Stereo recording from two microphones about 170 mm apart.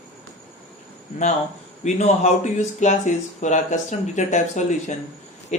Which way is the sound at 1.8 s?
45° left (ahead or behind).